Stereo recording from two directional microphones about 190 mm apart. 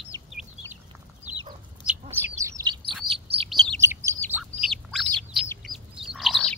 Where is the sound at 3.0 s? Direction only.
30° right (ahead or behind).